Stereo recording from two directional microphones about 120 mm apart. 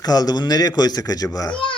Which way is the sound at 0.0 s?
35° left (ahead or behind).